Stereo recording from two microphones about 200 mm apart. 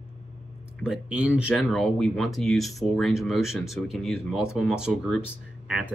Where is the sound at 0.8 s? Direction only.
5° right (ahead or behind).